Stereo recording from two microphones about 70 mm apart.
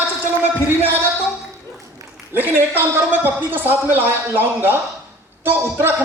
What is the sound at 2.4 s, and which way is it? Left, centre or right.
Speech, right.